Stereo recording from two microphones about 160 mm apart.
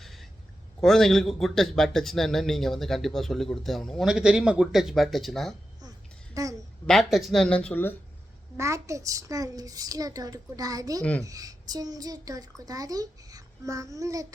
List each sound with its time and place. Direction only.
0.0 s a sound: centre (ahead or behind)
0.8 s a man's voice: centre (ahead or behind)
6.3 s a woman's voice: 20° right (ahead or behind)
6.8 s a man's voice: centre (ahead or behind)
8.5 s a child's voice: 20° right (ahead or behind)